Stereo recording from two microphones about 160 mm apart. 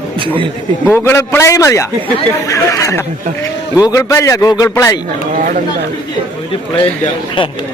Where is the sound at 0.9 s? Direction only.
15° left (ahead or behind).